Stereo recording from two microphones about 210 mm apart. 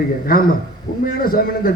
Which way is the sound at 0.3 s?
45° left (ahead or behind).